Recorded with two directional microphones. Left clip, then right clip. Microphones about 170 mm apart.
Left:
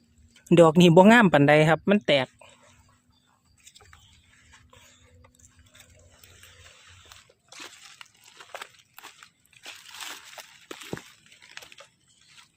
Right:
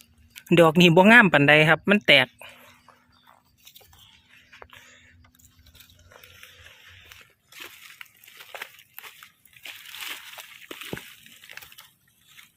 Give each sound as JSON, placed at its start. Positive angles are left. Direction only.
{"t": 0.4, "sound": "speech", "side_deg": 15}
{"t": 7.5, "sound": "a sound", "side_deg": -5}
{"t": 9.2, "sound": "crushing", "side_deg": 0}